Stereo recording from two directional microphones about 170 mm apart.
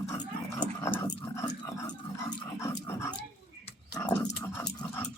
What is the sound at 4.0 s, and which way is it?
Dog, 15° left (ahead or behind).